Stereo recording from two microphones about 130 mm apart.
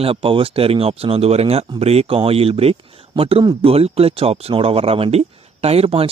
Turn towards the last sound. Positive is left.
turn(degrees=-50)  # may be behind; listen again after turning